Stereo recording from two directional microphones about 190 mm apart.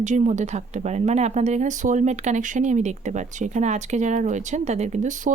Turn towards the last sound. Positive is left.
turn(degrees=-40)  # may be behind; listen again after turning